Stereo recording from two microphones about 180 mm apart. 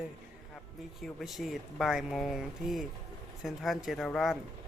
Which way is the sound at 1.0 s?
Centre (ahead or behind).